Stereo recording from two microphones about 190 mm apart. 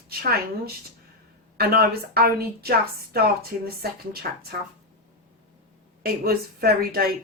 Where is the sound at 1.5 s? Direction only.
55° right (ahead or behind).